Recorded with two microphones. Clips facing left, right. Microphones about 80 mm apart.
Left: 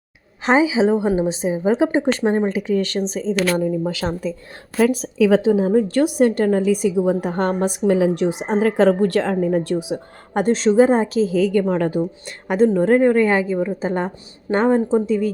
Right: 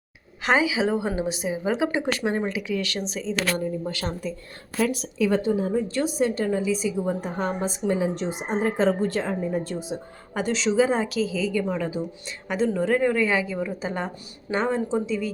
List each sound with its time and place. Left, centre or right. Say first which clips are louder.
0.4 s a woman's voice: left 6 dB; left
3.5 s speech: left 7 dB; left
5.3 s speech: left 8 dB; left
5.9 s a woman's voice: left 8 dB; left
10.4 s a woman's voice: left 7 dB; left
11.3 s a woman's voice: left 8 dB; left
12.6 s a woman's voice: left 8 dB; left